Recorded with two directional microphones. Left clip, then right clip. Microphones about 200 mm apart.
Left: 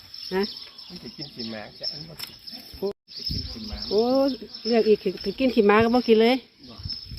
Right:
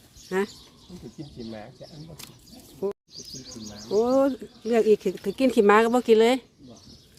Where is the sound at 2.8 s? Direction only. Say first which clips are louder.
Left 1 dB; 5° right (ahead or behind).